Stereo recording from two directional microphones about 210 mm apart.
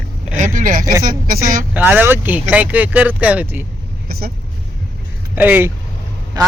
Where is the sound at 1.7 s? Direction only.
10° right (ahead or behind).